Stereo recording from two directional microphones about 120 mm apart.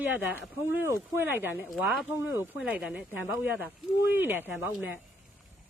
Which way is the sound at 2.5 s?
10° right (ahead or behind).